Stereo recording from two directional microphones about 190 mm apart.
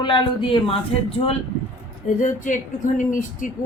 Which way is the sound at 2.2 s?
40° left (ahead or behind).